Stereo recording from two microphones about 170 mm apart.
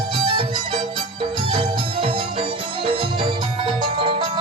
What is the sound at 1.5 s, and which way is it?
Music, 30° right (ahead or behind).